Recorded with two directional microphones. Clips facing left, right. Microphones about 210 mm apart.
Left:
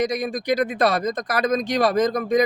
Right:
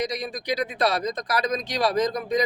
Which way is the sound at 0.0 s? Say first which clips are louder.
Left 5 dB; 50° left (ahead or behind).